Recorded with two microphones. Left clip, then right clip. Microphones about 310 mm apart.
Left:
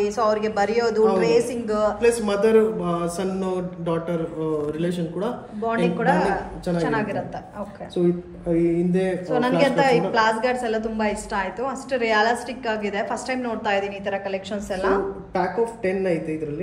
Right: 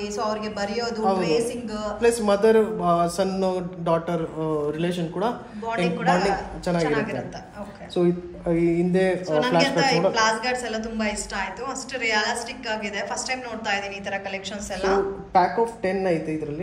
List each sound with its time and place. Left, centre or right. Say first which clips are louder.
0.0 s a woman's voice: left 6 dB; centre
2.0 s speech: even; right
5.9 s a woman's voice: even; centre
8.0 s speech: even; right
9.3 s a woman's voice: left 3 dB; centre
15.8 s speech: even; right